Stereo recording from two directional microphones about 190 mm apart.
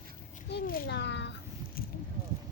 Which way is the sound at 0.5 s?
55° left (ahead or behind).